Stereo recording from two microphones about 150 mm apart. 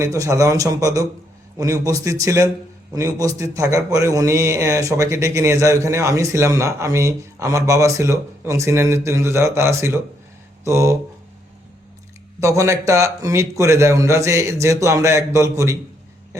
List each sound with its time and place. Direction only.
0.0 s a man's voice: 20° right (ahead or behind)
10.6 s a sound: 20° right (ahead or behind)
12.4 s a man's voice: 20° right (ahead or behind)